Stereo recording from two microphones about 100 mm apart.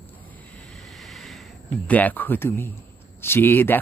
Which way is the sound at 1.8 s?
15° left (ahead or behind).